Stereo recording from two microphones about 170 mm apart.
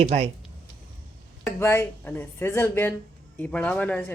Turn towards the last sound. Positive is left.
turn(degrees=10)  # may be behind; listen again after turning